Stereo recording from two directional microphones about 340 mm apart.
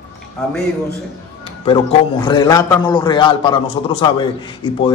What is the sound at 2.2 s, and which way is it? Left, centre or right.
A man's voice, centre.